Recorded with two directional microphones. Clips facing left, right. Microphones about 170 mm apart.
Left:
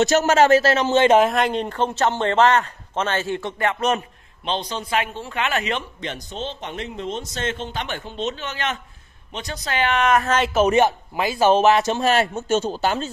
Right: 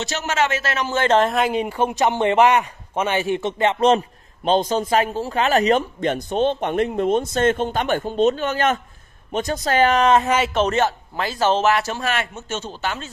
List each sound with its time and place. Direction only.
0.0 s a man's voice: 45° left (ahead or behind); by 1.0 s 25° left (ahead or behind)
1.2 s speech: centre (ahead or behind); by 4.0 s 25° right (ahead or behind)
4.5 s speech: 45° right (ahead or behind)
10.4 s speech: 5° left (ahead or behind)
12.0 s a man's voice: 35° left (ahead or behind)